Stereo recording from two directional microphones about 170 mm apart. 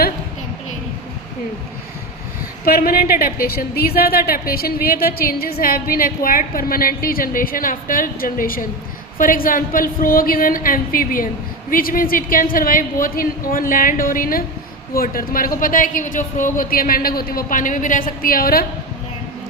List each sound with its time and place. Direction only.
2.6 s a woman's voice: 60° left (ahead or behind)